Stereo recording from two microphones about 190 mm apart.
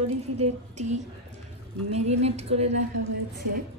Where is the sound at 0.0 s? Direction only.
35° right (ahead or behind).